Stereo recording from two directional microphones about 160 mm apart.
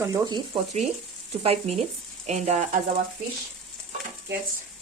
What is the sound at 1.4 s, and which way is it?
Frying, 40° right (ahead or behind).